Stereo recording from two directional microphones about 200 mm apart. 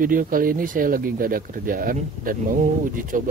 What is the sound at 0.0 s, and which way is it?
Speech, 45° right (ahead or behind).